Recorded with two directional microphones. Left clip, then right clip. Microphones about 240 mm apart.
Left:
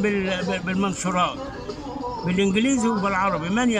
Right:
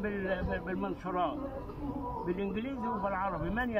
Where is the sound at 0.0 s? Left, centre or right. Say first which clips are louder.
Left 11 dB; centre.